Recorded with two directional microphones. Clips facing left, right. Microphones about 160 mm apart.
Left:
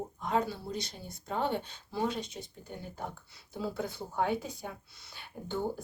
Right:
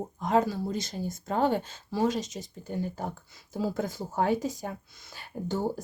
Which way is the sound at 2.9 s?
40° right (ahead or behind).